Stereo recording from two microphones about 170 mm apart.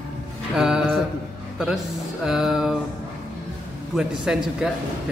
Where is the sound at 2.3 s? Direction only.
Centre (ahead or behind).